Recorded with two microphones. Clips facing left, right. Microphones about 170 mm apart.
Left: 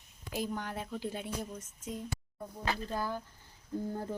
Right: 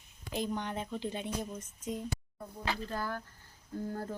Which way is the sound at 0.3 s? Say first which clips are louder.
Right 1 dB; 5° left (ahead or behind).